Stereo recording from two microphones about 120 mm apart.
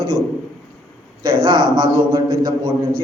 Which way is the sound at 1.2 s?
35° right (ahead or behind).